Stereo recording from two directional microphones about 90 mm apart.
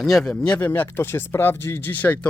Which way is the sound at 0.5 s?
25° left (ahead or behind).